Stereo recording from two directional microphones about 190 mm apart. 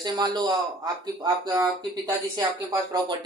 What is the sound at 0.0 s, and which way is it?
Speech, 20° right (ahead or behind).